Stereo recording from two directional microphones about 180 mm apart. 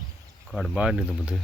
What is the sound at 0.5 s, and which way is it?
Speech, 5° right (ahead or behind).